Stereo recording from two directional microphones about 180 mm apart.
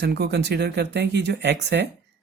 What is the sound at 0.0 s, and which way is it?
Speech, 65° right (ahead or behind).